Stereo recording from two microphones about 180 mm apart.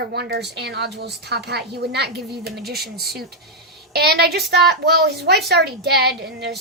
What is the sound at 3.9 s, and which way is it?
A woman's voice, 60° right (ahead or behind).